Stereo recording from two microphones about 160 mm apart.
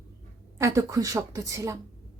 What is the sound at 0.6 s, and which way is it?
A woman's voice, 20° right (ahead or behind).